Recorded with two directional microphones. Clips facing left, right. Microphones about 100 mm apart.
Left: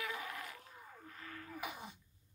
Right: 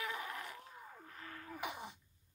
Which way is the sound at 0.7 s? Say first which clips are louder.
Right 1 dB; 15° right (ahead or behind).